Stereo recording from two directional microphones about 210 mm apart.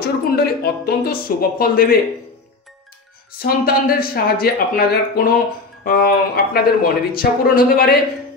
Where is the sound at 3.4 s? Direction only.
45° left (ahead or behind).